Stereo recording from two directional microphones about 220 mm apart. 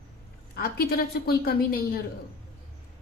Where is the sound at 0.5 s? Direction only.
45° left (ahead or behind).